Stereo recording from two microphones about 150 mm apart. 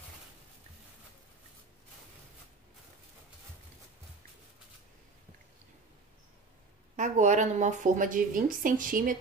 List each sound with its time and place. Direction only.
7.0 s a woman's voice: 55° right (ahead or behind)